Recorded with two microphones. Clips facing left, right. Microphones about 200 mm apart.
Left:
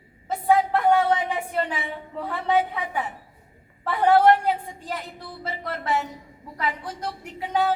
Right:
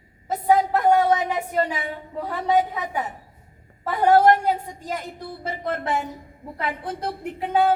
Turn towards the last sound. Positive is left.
turn(degrees=-55)  # may be behind; listen again after turning